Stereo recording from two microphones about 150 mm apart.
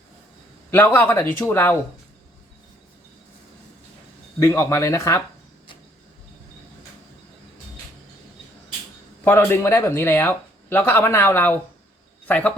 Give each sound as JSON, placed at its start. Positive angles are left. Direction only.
{"t": 0.7, "sound": "speech", "side_deg": 10}
{"t": 4.4, "sound": "speech", "side_deg": 20}
{"t": 9.2, "sound": "speech", "side_deg": 15}